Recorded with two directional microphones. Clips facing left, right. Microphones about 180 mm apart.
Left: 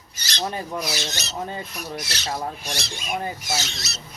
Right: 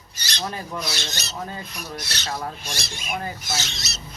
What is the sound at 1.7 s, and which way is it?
Speech, 5° left (ahead or behind).